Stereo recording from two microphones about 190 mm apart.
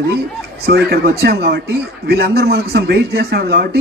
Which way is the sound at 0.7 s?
55° right (ahead or behind).